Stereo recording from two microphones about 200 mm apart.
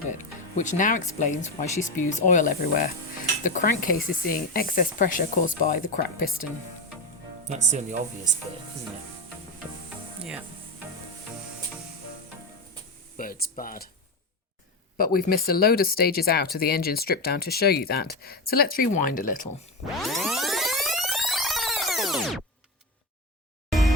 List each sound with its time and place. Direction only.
0.5 s speech: 40° left (ahead or behind)
7.4 s speech: 35° right (ahead or behind)
13.1 s speech: 45° left (ahead or behind)
14.9 s speech: 45° left (ahead or behind)
20.0 s music: centre (ahead or behind)